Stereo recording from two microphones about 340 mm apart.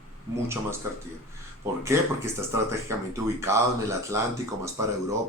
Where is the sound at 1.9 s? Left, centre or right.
Centre.